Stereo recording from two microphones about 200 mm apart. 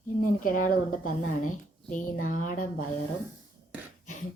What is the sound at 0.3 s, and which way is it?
Speech, 45° left (ahead or behind).